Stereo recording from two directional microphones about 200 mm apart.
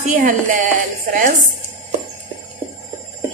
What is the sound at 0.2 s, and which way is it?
Speech, 40° right (ahead or behind).